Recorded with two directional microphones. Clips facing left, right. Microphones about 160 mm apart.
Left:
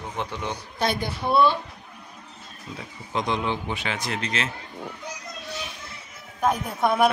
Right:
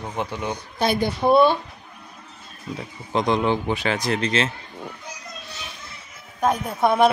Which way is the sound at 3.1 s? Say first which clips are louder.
Right 6 dB; 40° right (ahead or behind).